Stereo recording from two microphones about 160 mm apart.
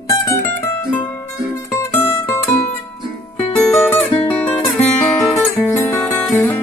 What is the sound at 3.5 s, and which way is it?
Music, 5° left (ahead or behind).